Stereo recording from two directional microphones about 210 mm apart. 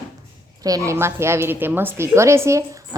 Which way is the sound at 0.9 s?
10° right (ahead or behind).